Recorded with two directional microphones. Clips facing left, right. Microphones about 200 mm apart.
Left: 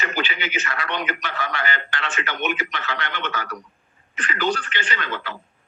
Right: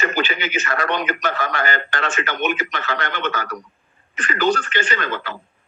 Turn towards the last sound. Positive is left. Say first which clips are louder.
# right 4 dB
turn(degrees=-45)  # may be behind; listen again after turning